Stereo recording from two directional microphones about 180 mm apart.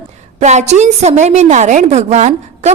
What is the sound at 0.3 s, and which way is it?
A woman's voice, 40° right (ahead or behind).